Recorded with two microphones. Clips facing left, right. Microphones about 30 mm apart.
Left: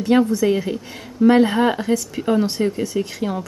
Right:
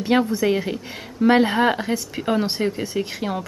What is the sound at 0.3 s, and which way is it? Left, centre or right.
Speech, right.